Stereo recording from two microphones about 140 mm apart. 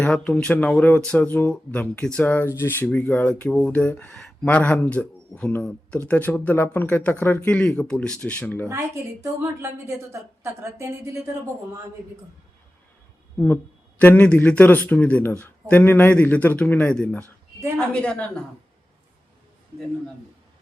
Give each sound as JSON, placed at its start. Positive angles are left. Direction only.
{"t": 0.0, "sound": "speech", "side_deg": 5}
{"t": 8.7, "sound": "a woman's voice", "side_deg": -20}
{"t": 14.0, "sound": "speech", "side_deg": 10}